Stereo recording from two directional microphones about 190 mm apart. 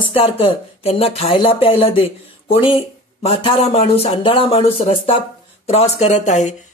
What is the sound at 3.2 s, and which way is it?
Speech, 30° left (ahead or behind).